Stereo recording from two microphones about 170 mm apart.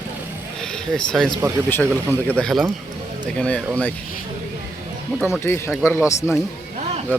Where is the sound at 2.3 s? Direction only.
Centre (ahead or behind).